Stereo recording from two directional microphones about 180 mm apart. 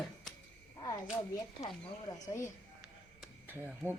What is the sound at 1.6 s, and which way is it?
Speech, 35° left (ahead or behind).